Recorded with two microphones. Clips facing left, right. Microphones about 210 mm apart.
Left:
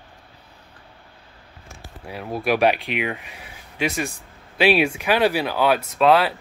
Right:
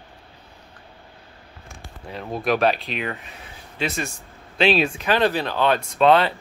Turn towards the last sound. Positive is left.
turn(degrees=5)  # may be behind; listen again after turning